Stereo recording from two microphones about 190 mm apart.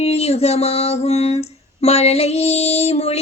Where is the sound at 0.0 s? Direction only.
35° left (ahead or behind).